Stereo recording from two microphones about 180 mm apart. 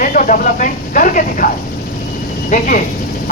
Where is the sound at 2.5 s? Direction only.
50° left (ahead or behind).